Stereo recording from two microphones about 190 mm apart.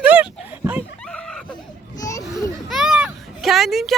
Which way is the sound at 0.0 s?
10° right (ahead or behind).